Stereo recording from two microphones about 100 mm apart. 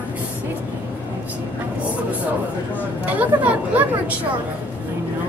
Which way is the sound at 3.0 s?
15° right (ahead or behind).